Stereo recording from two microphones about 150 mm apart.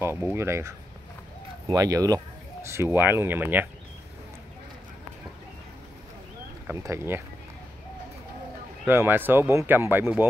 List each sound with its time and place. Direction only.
0.0 s speech: 15° right (ahead or behind)
6.7 s speech: 20° right (ahead or behind)
8.8 s speech: 15° right (ahead or behind)